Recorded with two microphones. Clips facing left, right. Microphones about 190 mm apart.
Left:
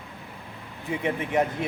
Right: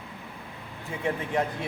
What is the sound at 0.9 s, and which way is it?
Speech, 20° left (ahead or behind).